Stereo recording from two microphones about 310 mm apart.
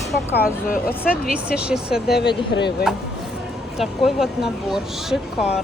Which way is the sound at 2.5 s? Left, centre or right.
Left.